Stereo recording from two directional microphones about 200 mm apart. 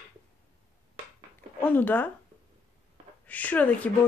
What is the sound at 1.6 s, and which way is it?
Speech, 10° left (ahead or behind).